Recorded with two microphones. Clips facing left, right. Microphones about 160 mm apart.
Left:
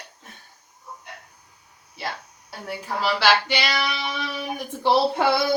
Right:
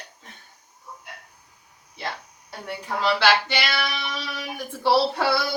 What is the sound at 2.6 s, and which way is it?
Speech, 5° left (ahead or behind).